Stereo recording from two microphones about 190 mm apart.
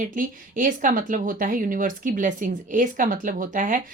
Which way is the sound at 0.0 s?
45° right (ahead or behind).